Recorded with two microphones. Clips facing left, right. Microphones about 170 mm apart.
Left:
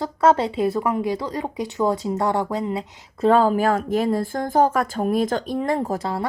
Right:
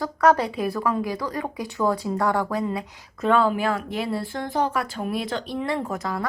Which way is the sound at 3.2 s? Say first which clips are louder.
Left 4 dB; 40° left (ahead or behind).